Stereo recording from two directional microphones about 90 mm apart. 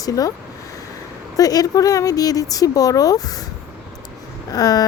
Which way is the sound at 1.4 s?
45° left (ahead or behind).